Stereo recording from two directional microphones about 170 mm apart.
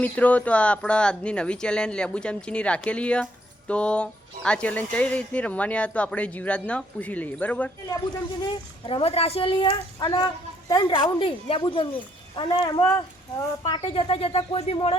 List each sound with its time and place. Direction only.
0.0 s speech: 10° left (ahead or behind)
8.9 s speech: 35° left (ahead or behind); by 13.7 s 20° left (ahead or behind)
13.9 s speech: 30° left (ahead or behind)